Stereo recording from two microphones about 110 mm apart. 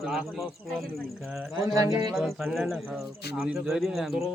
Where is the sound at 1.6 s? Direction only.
30° right (ahead or behind).